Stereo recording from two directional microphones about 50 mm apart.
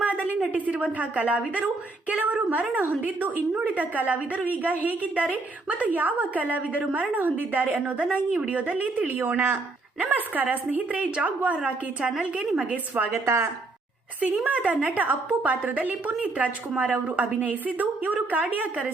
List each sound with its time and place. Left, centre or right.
0.5 s a woman's voice: right
13.1 s speech: right
14.4 s a woman's voice: right